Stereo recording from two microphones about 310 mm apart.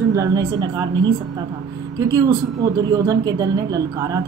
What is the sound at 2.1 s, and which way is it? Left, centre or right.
A woman's voice, centre.